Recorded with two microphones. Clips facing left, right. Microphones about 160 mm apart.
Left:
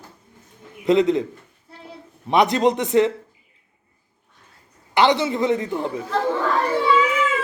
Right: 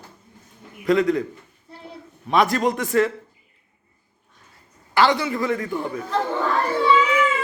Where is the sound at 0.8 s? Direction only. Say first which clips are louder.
Left 2 dB; 20° left (ahead or behind).